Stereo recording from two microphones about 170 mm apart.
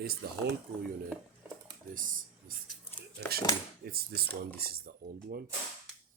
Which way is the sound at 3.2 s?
65° right (ahead or behind).